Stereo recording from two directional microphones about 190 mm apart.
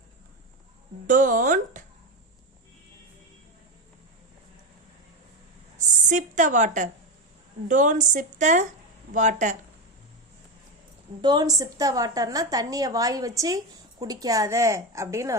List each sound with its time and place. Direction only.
1.0 s music: 45° right (ahead or behind)
5.7 s a sound: 40° right (ahead or behind)
7.7 s a woman's voice: 40° right (ahead or behind)
11.2 s a woman's voice: 20° right (ahead or behind)